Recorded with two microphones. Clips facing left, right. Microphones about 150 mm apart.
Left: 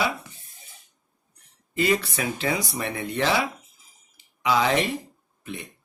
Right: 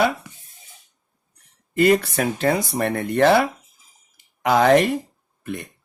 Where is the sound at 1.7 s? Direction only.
55° right (ahead or behind).